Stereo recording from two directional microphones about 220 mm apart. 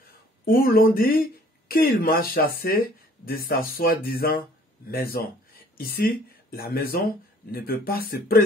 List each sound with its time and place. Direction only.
0.5 s speech: 40° left (ahead or behind)